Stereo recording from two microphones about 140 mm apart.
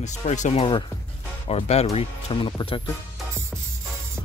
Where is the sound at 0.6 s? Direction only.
35° left (ahead or behind).